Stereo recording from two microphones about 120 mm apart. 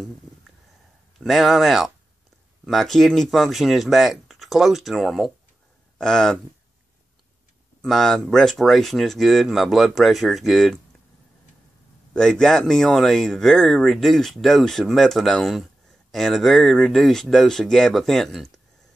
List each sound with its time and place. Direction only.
1.1 s speech: centre (ahead or behind)
7.8 s speech: 5° left (ahead or behind)
12.1 s speech: 5° left (ahead or behind)